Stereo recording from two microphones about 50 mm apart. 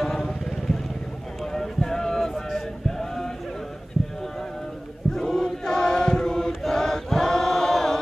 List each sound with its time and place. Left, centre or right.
0.0 s vehicle: centre
1.4 s chant: centre
5.1 s chant: centre
6.6 s choir: centre